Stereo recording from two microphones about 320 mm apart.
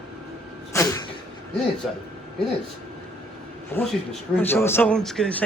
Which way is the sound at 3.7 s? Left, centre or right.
Centre.